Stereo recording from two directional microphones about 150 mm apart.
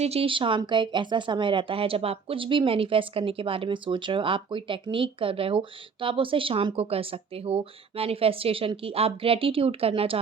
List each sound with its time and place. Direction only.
0.0 s speech: 40° right (ahead or behind)